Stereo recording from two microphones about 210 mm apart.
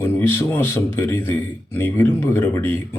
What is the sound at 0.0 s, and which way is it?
A man's voice, 10° left (ahead or behind).